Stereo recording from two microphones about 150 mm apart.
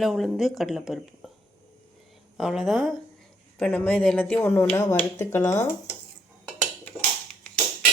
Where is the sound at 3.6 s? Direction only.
10° left (ahead or behind).